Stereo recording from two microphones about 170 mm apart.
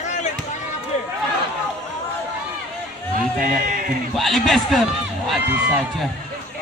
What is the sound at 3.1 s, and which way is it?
Speech, 50° right (ahead or behind).